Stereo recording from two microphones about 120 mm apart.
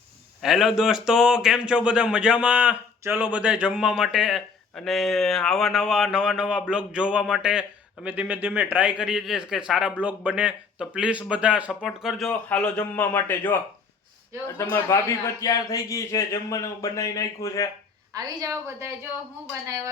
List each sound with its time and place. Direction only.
0.4 s a man's voice: 5° right (ahead or behind)
12.3 s a man's voice: 10° left (ahead or behind); by 17.7 s 25° left (ahead or behind)
18.1 s a woman's voice: 30° right (ahead or behind)